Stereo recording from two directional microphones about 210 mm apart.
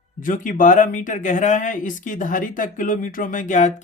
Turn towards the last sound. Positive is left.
turn(degrees=35)  # may be behind; listen again after turning